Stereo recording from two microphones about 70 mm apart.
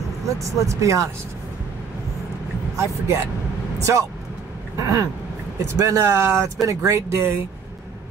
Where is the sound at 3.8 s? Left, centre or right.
Right.